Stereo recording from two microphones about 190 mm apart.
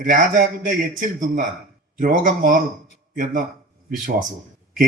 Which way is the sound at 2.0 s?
45° right (ahead or behind).